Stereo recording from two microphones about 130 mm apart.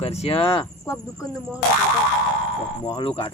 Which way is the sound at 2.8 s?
30° left (ahead or behind).